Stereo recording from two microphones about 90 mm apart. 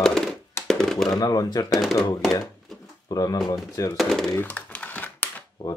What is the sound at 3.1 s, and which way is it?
Speech, 45° left (ahead or behind).